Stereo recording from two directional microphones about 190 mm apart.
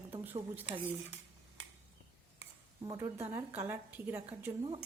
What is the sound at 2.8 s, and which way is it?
A woman's voice, 20° right (ahead or behind).